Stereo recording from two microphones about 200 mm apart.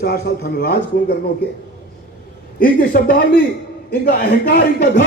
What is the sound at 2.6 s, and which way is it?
A man's voice, 45° left (ahead or behind).